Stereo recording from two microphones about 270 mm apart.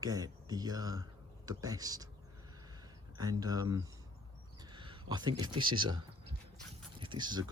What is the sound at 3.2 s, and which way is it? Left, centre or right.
Speech, centre.